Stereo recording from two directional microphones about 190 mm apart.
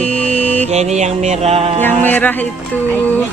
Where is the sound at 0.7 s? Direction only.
35° right (ahead or behind).